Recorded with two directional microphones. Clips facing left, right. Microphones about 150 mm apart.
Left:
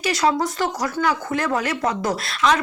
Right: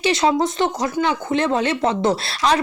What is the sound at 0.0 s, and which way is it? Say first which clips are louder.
Speech: right 3 dB; 25° right (ahead or behind).